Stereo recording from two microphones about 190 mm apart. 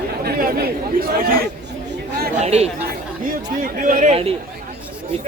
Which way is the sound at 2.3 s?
35° right (ahead or behind).